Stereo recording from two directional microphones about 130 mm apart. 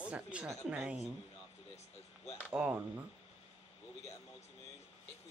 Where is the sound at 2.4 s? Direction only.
15° right (ahead or behind).